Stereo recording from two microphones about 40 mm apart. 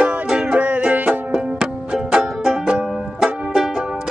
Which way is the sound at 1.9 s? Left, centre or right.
Centre.